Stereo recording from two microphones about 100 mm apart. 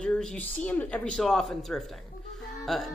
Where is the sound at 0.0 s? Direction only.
5° left (ahead or behind).